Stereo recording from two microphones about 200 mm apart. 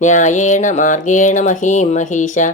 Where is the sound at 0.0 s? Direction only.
40° left (ahead or behind).